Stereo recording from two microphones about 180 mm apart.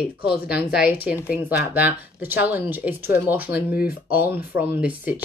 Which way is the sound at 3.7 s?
55° left (ahead or behind).